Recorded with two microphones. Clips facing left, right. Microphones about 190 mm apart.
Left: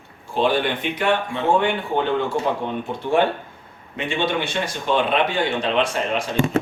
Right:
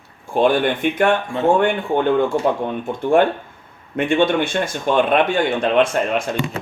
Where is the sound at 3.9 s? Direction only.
50° right (ahead or behind).